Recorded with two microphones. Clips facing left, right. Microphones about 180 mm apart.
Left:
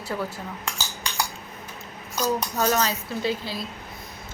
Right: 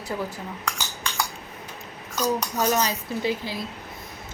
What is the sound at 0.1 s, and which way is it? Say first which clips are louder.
Speech: even; 20° right (ahead or behind).